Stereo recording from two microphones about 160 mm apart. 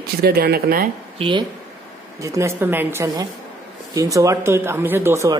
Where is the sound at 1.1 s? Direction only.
35° right (ahead or behind).